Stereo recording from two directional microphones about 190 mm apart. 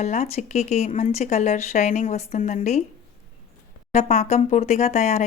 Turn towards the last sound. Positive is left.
turn(degrees=35)  # may be behind; listen again after turning